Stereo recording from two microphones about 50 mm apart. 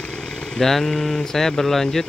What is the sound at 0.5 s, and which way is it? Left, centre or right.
Speech, centre.